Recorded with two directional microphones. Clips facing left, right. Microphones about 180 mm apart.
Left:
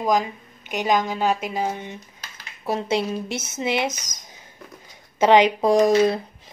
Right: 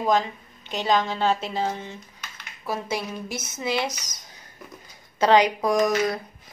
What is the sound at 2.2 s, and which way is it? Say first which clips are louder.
Speech: left 4 dB; 25° left (ahead or behind).